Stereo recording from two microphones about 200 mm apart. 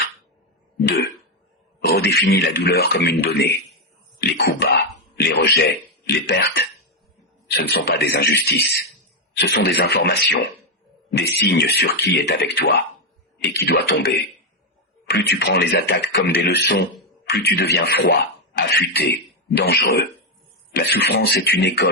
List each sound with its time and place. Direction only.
1.8 s speech: 55° left (ahead or behind)